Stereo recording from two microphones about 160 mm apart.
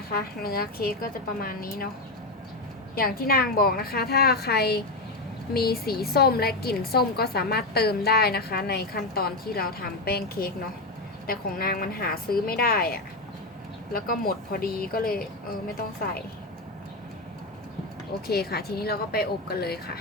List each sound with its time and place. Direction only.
0.4 s a woman's voice: 70° left (ahead or behind)
2.9 s a woman's voice: 65° left (ahead or behind)
18.3 s a woman's voice: 80° left